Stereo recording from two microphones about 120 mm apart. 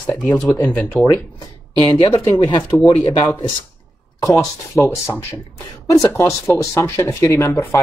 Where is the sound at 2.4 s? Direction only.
35° left (ahead or behind).